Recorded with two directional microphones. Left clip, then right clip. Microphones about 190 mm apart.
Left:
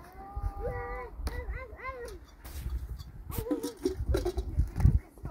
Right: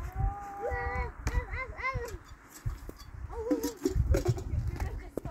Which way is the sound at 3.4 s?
5° right (ahead or behind).